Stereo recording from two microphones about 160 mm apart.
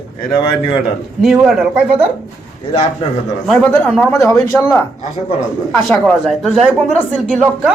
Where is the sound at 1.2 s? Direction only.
Centre (ahead or behind).